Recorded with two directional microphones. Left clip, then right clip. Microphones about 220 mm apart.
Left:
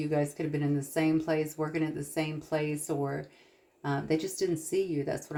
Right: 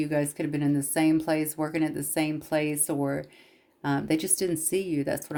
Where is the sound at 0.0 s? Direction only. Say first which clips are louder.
Right 3 dB; 45° right (ahead or behind).